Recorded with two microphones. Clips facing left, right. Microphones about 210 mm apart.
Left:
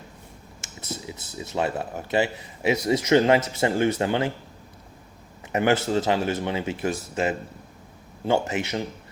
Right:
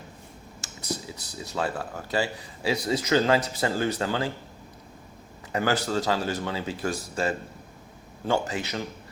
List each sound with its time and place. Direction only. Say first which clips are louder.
0.8 s speech: right 1 dB; 25° left (ahead or behind)
5.5 s speech: left 4 dB; 25° left (ahead or behind)